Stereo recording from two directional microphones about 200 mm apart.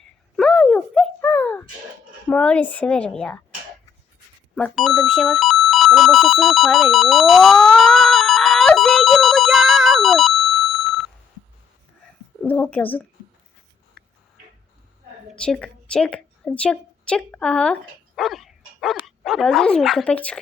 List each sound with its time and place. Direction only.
0.3 s a sound: 5° left (ahead or behind)
2.3 s a woman's voice: 5° left (ahead or behind)
4.5 s telephone bell ringing: centre (ahead or behind)
12.4 s a woman's voice: 10° left (ahead or behind)
15.3 s a woman's voice: 5° left (ahead or behind)
18.2 s dog: centre (ahead or behind)
19.0 s speech: centre (ahead or behind)